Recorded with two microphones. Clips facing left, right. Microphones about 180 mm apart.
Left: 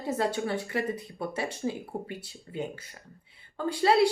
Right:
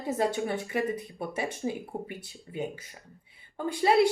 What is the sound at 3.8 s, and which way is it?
Speech, 20° right (ahead or behind).